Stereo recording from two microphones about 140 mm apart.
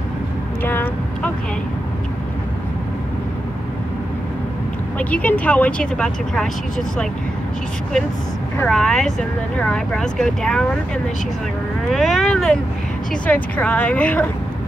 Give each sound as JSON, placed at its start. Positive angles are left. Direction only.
{"t": 0.7, "sound": "speech", "side_deg": 15}
{"t": 4.9, "sound": "speech", "side_deg": 10}
{"t": 8.6, "sound": "speech", "side_deg": 5}
{"t": 11.9, "sound": "speech", "side_deg": 0}